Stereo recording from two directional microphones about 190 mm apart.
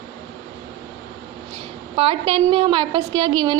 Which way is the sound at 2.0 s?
25° right (ahead or behind).